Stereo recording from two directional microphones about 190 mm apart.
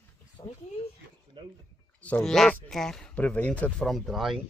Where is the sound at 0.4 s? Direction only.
20° left (ahead or behind).